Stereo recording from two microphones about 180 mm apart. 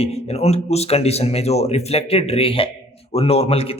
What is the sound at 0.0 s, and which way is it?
A man's voice, 35° left (ahead or behind).